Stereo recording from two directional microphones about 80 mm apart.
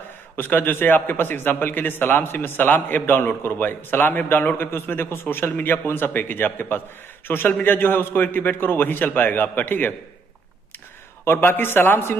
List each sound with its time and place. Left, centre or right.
0.4 s a man's voice: left
11.2 s a man's voice: left